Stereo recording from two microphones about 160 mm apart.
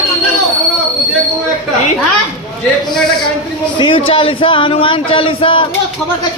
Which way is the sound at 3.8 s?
35° left (ahead or behind).